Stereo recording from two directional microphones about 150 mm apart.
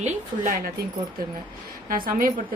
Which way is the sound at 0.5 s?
80° right.